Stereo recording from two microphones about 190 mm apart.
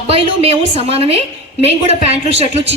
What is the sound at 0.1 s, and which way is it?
A man's voice, 30° right (ahead or behind).